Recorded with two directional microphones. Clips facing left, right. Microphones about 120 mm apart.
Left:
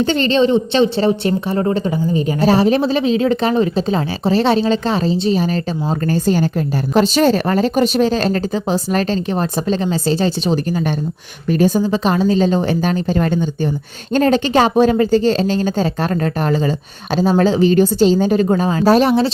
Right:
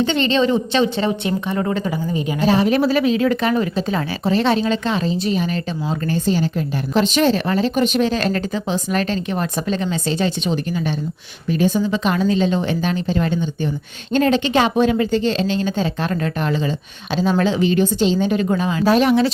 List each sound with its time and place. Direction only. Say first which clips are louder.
0.0 s a woman's voice: left 3 dB; 40° left (ahead or behind)